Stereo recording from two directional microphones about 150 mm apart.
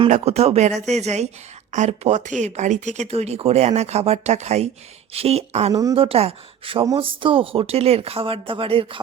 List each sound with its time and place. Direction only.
0.1 s speech: 45° right (ahead or behind)
5.7 s a woman's voice: 25° right (ahead or behind)
6.0 s speech: 40° right (ahead or behind)